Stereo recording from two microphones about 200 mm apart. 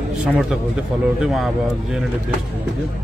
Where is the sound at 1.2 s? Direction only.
Centre (ahead or behind).